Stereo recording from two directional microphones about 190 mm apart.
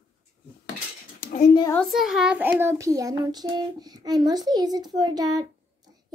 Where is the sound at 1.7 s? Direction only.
Centre (ahead or behind).